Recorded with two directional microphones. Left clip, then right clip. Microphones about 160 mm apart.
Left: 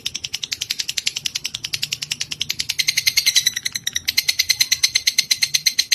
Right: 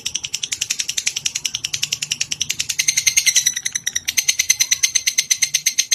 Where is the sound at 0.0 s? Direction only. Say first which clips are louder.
Right 2 dB; 35° left (ahead or behind).